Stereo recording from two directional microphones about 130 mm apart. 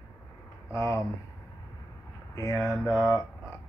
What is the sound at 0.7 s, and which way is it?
Speech, 25° left (ahead or behind).